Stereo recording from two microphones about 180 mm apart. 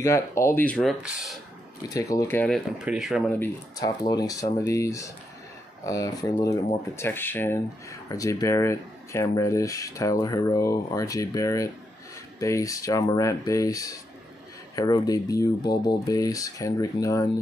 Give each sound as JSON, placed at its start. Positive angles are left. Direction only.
{"t": 0.0, "sound": "speech", "side_deg": 15}
{"t": 2.0, "sound": "speech", "side_deg": 20}
{"t": 3.3, "sound": "speech", "side_deg": 15}